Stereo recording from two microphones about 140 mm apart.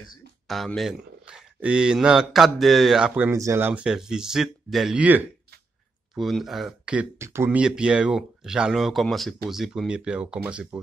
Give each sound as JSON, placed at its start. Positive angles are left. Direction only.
{"t": 0.5, "sound": "a man's voice", "side_deg": 0}
{"t": 3.3, "sound": "speech", "side_deg": -20}
{"t": 3.8, "sound": "a man's voice", "side_deg": -5}
{"t": 6.1, "sound": "a man's voice", "side_deg": 0}
{"t": 7.2, "sound": "speech", "side_deg": -20}